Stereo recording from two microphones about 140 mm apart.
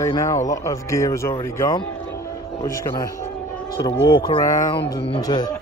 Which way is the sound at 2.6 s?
25° left (ahead or behind).